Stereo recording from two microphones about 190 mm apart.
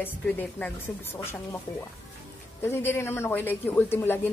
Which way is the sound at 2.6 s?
10° left (ahead or behind).